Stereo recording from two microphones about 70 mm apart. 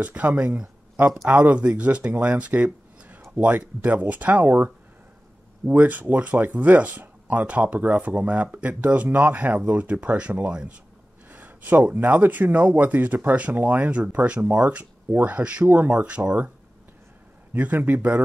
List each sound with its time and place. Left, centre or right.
0.0 s speech: right
17.6 s speech: right